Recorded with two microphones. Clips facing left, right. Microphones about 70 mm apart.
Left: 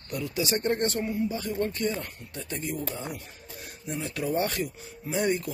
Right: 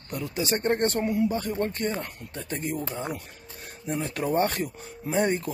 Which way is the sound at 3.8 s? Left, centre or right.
Right.